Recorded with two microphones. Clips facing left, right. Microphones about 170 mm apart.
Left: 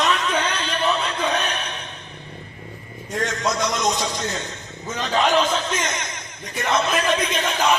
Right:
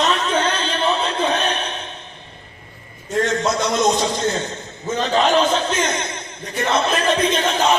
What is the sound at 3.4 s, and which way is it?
Speech, 30° right (ahead or behind).